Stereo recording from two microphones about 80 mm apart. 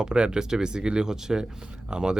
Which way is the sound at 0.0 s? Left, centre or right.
Centre.